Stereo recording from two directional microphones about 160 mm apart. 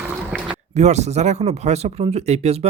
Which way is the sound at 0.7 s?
45° right (ahead or behind).